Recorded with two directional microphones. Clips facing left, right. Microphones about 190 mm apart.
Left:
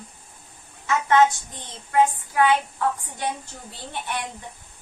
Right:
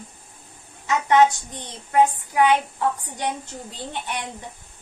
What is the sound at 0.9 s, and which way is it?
A woman's voice, 15° right (ahead or behind).